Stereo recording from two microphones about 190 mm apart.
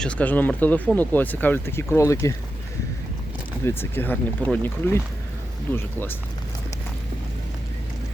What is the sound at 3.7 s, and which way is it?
Speech, 10° left (ahead or behind).